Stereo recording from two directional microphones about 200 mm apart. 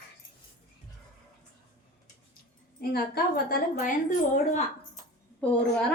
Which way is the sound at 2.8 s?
50° left (ahead or behind).